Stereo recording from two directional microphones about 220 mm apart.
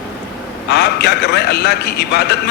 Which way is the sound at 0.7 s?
50° left (ahead or behind).